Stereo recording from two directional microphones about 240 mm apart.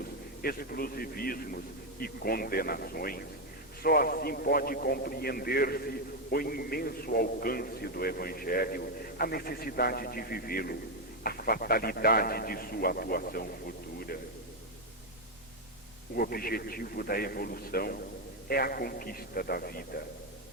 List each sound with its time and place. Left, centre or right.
0.4 s a man's voice: left
16.1 s a man's voice: left